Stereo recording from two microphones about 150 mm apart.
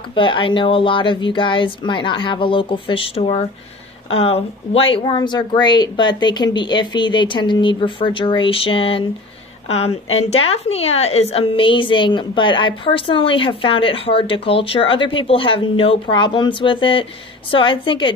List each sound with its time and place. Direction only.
0.1 s a woman's voice: 35° left (ahead or behind)